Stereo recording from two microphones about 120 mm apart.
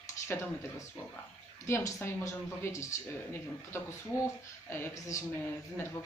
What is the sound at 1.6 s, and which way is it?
Speech, 20° left (ahead or behind).